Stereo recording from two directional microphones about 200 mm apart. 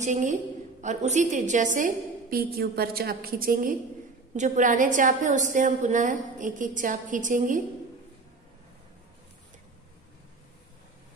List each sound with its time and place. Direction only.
0.0 s a woman's voice: 35° right (ahead or behind)